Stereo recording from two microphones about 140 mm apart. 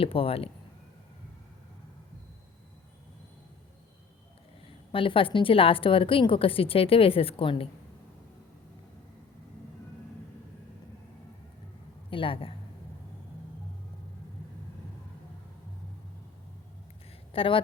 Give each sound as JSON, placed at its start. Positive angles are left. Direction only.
{"t": 0.0, "sound": "speech", "side_deg": 40}
{"t": 4.9, "sound": "a woman's voice", "side_deg": 40}
{"t": 12.1, "sound": "a woman's voice", "side_deg": 40}
{"t": 17.3, "sound": "a woman's voice", "side_deg": 40}